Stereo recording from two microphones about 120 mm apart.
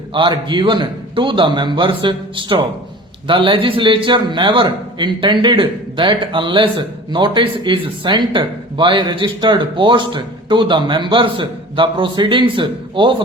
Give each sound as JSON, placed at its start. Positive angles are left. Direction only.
{"t": 0.1, "sound": "a man's voice", "side_deg": -40}